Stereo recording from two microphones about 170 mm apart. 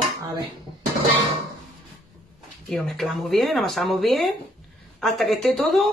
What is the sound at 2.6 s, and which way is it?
Speech, centre (ahead or behind).